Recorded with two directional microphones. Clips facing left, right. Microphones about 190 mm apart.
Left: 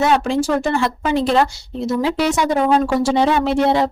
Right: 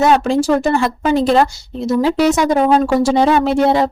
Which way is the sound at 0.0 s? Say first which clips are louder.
Right 3 dB; 40° right (ahead or behind).